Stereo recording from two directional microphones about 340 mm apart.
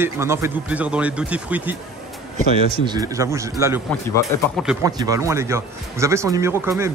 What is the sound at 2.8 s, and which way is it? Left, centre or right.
Speech, centre.